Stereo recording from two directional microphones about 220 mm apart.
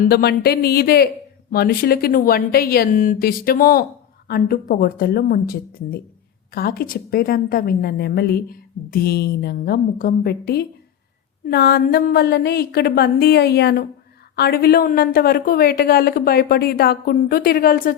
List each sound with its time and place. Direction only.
0.0 s a woman's voice: 45° left (ahead or behind)